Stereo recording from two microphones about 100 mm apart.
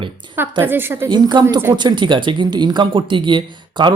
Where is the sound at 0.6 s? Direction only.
20° right (ahead or behind).